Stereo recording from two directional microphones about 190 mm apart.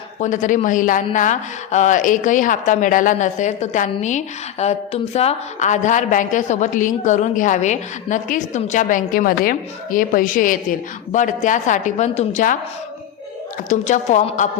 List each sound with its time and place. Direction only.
0.2 s a woman's voice: 40° left (ahead or behind)
13.7 s a woman's voice: 40° left (ahead or behind)